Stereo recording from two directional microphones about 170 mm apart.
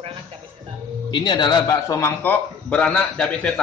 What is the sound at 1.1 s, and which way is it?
A man's voice, 25° left (ahead or behind).